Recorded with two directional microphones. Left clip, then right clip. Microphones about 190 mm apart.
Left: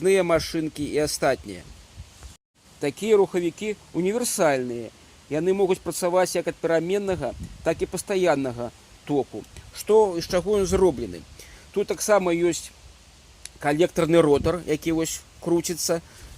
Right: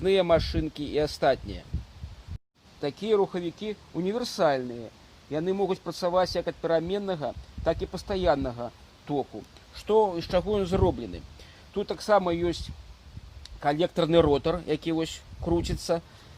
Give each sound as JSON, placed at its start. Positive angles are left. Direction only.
{"t": 0.0, "sound": "speech", "side_deg": 35}
{"t": 2.8, "sound": "speech", "side_deg": 40}